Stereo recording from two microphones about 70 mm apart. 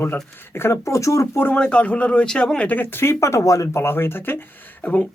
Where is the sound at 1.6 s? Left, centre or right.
Centre; by 4.4 s left.